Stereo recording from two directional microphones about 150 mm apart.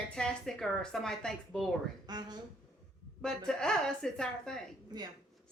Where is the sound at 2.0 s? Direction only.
30° right (ahead or behind).